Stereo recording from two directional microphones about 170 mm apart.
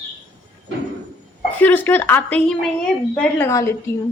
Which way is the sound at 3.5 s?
20° left (ahead or behind).